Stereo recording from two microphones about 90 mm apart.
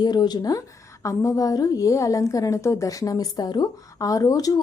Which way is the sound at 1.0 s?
35° left (ahead or behind).